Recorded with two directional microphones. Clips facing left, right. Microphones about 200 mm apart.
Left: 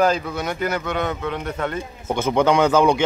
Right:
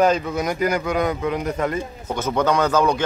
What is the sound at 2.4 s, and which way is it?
Speech, 25° left (ahead or behind).